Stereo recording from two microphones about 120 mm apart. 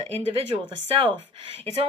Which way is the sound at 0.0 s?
55° right (ahead or behind).